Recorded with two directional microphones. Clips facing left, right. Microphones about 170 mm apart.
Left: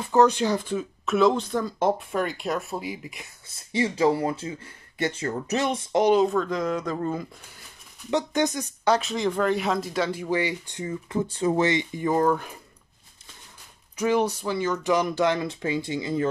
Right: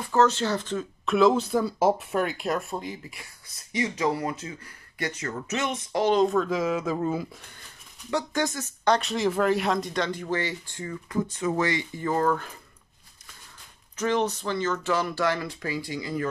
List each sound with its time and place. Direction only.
0.1 s speech: 15° left (ahead or behind)
6.0 s speech: 5° left (ahead or behind)
8.1 s speech: 20° left (ahead or behind)
8.8 s speech: 5° left (ahead or behind)
13.9 s speech: 10° left (ahead or behind)